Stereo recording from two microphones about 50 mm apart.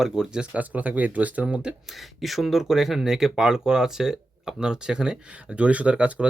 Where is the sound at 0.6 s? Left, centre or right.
Right.